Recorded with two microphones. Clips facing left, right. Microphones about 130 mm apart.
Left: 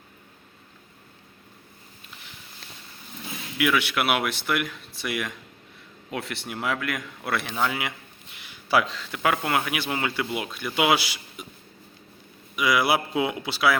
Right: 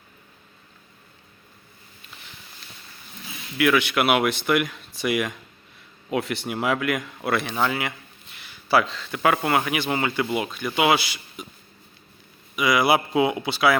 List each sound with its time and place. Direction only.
3.6 s a man's voice: 5° left (ahead or behind)
12.5 s speech: 5° left (ahead or behind)